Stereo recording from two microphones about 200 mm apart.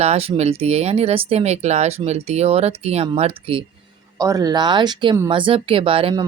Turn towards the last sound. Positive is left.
turn(degrees=-25)  # may be behind; listen again after turning